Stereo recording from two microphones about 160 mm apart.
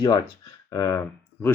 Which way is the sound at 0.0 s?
25° left (ahead or behind).